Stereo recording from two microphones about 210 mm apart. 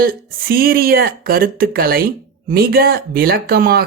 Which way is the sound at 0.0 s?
45° right (ahead or behind).